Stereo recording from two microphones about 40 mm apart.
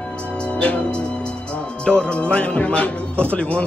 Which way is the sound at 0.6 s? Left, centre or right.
Left.